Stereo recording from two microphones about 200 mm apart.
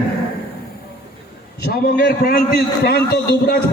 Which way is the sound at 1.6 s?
50° left (ahead or behind).